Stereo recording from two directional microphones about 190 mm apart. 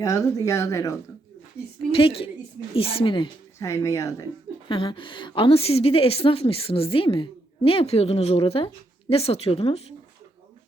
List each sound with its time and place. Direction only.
0.0 s speech: 15° left (ahead or behind)
1.9 s a woman's voice: 30° left (ahead or behind)
4.7 s a woman's voice: 25° left (ahead or behind)